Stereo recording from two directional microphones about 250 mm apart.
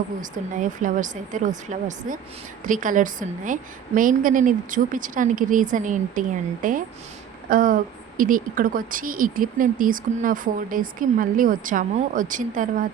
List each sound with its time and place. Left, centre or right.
0.2 s speech: right